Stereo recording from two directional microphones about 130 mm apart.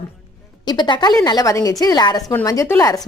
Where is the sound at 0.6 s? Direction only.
35° left (ahead or behind).